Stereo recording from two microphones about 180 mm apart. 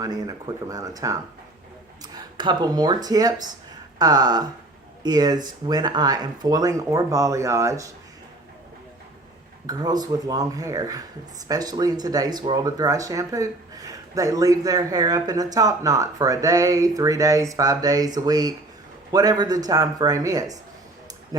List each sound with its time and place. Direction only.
0.0 s speech: 20° right (ahead or behind)
2.1 s speech: 25° right (ahead or behind)
9.6 s speech: 20° right (ahead or behind)